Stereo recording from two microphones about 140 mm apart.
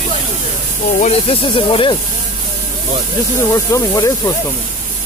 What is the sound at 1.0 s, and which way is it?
Speech, 45° left (ahead or behind).